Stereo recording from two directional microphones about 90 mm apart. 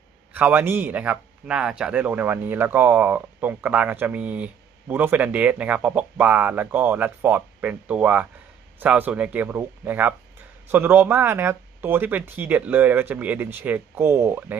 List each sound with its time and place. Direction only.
0.3 s a man's voice: 20° right (ahead or behind)